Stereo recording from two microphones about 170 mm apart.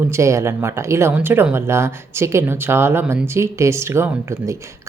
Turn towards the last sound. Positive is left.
turn(degrees=-15)  # may be behind; listen again after turning